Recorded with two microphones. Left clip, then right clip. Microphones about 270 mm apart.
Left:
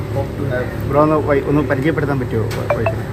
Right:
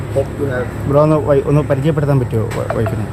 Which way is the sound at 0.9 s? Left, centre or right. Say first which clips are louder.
Right 2 dB; right.